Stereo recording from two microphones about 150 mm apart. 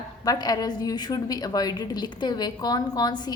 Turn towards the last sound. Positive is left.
turn(degrees=30)  # may be behind; listen again after turning